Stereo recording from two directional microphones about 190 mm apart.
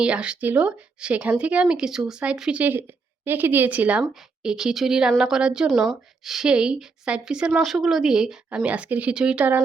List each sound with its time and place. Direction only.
0.0 s a woman's voice: 5° right (ahead or behind)